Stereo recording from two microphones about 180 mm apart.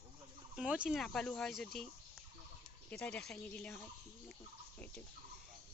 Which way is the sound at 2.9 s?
10° left (ahead or behind).